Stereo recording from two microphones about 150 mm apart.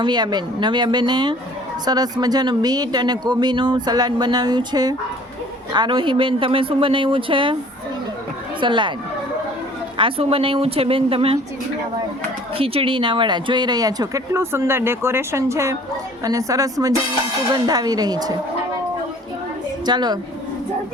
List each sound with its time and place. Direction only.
0.0 s speech: 30° right (ahead or behind)
8.6 s speech: 30° right (ahead or behind)
10.0 s speech: 40° right (ahead or behind)
12.5 s speech: 40° right (ahead or behind)
19.8 s a woman's voice: 30° right (ahead or behind)